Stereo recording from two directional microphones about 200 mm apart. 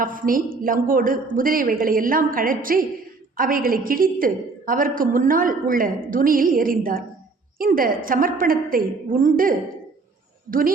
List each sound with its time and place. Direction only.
0.0 s a woman's voice: 45° right (ahead or behind)